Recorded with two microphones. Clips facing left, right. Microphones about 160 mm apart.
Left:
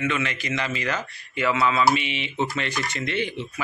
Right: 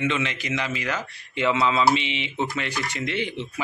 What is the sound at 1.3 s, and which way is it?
Speech, 20° right (ahead or behind).